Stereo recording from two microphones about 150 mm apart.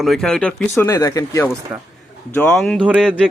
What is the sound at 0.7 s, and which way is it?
Speech, 20° left (ahead or behind).